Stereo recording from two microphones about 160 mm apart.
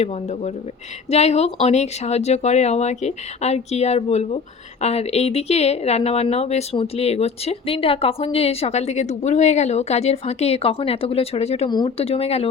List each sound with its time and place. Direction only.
0.0 s speech: 40° left (ahead or behind)